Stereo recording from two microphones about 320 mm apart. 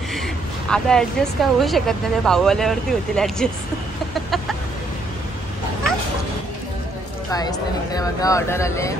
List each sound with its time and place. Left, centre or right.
0.7 s speech: centre
7.9 s speech: centre